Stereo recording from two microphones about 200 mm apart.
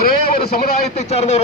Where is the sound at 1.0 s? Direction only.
30° left (ahead or behind).